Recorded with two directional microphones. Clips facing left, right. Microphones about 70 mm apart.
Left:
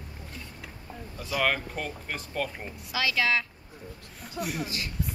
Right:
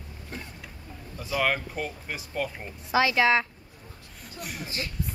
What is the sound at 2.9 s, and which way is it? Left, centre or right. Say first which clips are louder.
Speech: right 5 dB; right.